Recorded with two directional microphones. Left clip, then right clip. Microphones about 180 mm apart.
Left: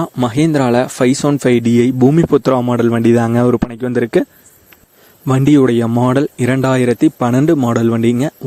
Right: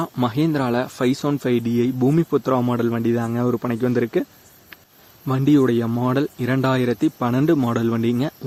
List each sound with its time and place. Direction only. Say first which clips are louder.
0.0 s speech: left 6 dB; 40° left (ahead or behind)